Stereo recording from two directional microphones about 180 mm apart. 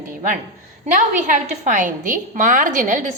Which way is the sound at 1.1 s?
45° right (ahead or behind).